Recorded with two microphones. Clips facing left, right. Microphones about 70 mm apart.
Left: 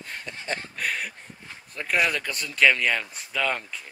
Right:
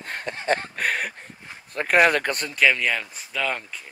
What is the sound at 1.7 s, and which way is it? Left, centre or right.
Speech, right.